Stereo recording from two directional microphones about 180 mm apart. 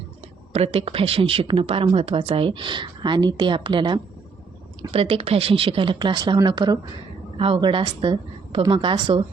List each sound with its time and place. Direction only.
0.5 s speech: 35° right (ahead or behind)